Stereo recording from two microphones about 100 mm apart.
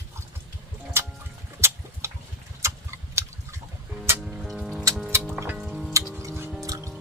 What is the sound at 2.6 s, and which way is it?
Tick-tock, 30° right (ahead or behind).